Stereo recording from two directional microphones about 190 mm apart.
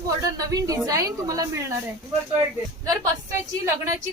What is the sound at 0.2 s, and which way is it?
A woman's voice, 20° right (ahead or behind).